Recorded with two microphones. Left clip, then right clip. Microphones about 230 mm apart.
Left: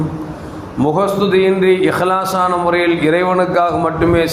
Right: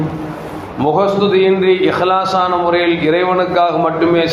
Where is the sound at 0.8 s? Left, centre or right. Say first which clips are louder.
Right 2 dB; left.